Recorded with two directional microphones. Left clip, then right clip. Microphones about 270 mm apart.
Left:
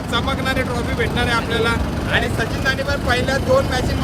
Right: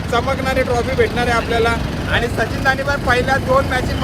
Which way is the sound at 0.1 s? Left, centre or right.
Centre.